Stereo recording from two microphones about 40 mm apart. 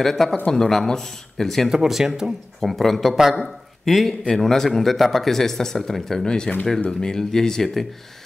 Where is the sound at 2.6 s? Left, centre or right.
Centre.